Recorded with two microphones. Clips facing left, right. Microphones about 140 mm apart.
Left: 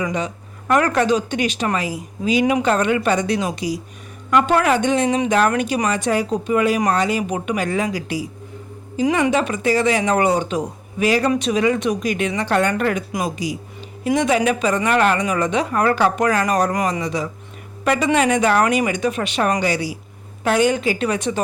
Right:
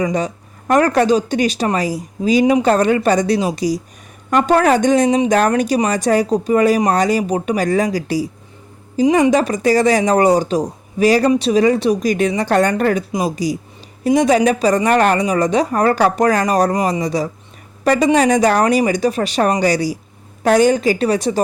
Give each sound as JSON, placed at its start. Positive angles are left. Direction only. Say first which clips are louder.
{"t": 0.0, "sound": "speech", "louder": "right 5 dB", "side_deg": -40}